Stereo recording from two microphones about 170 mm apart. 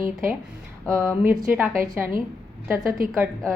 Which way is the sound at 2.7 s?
Centre (ahead or behind).